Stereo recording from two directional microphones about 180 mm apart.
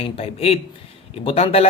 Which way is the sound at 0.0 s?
30° left (ahead or behind).